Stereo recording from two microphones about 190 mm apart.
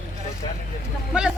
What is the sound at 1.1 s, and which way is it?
Speech, 5° right (ahead or behind).